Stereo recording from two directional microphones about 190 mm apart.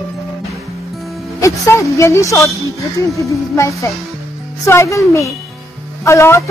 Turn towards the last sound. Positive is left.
turn(degrees=15)  # may be behind; listen again after turning